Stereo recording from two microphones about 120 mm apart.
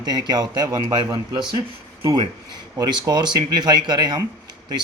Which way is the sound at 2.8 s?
35° right (ahead or behind).